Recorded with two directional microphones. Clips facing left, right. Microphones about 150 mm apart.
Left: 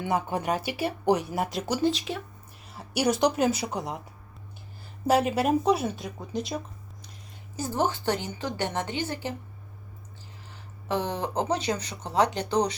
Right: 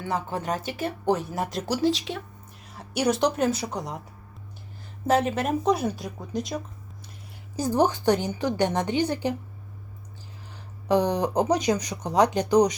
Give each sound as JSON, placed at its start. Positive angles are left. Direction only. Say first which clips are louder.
{"t": 0.0, "sound": "speech", "louder": "left 2 dB", "side_deg": 15}
{"t": 2.7, "sound": "a sound", "louder": "right 1 dB", "side_deg": 5}
{"t": 3.2, "sound": "speech", "louder": "even", "side_deg": 10}
{"t": 5.0, "sound": "speech", "louder": "even", "side_deg": 10}
{"t": 7.5, "sound": "speech", "louder": "right 5 dB", "side_deg": -15}
{"t": 10.8, "sound": "speech", "louder": "right 6 dB", "side_deg": -15}